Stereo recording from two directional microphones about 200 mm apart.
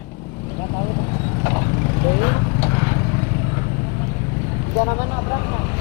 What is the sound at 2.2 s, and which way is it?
Vehicle, 20° left (ahead or behind).